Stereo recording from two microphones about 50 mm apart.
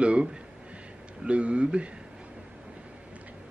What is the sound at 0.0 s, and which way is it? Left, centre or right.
Speech, right.